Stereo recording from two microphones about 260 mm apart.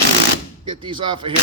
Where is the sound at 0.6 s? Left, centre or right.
Centre.